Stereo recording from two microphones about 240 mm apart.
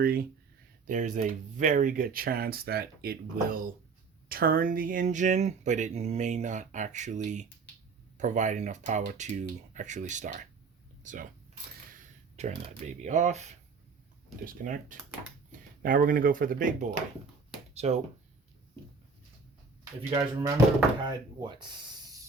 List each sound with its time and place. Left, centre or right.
0.0 s speech: right
12.4 s speech: right
19.8 s speech: centre